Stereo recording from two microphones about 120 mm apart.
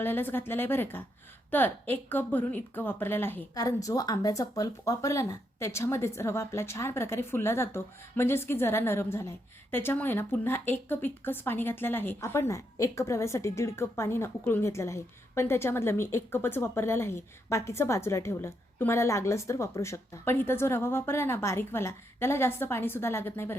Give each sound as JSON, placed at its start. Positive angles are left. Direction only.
{"t": 0.0, "sound": "a woman's voice", "side_deg": 15}
{"t": 3.5, "sound": "a woman's voice", "side_deg": 30}